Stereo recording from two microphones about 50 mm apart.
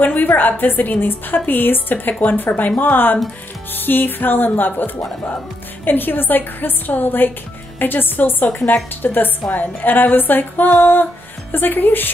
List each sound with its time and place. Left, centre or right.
0.0 s a woman's voice: left